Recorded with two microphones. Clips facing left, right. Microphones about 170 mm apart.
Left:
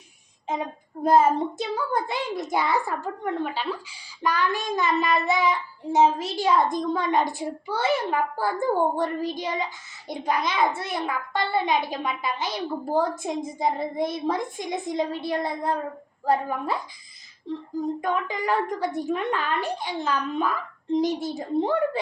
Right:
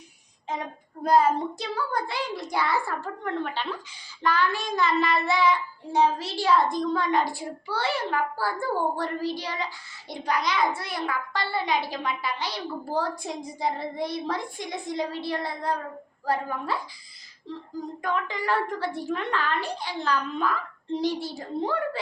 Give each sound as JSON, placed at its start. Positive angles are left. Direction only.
{"t": 1.0, "sound": "a child's voice", "side_deg": 20}
{"t": 18.0, "sound": "a child's voice", "side_deg": 20}